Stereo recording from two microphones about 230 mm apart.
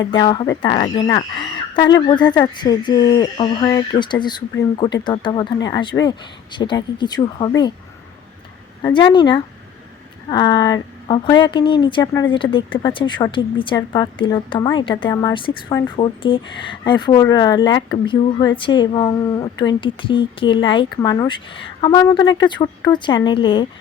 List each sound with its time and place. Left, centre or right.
0.0 s speech: centre
8.8 s speech: centre